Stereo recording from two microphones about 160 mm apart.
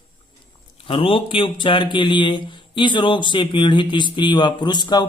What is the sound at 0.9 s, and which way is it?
Speech, 35° left (ahead or behind).